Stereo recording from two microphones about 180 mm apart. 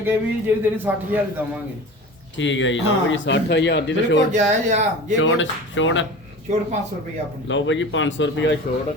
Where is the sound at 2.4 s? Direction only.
90° left.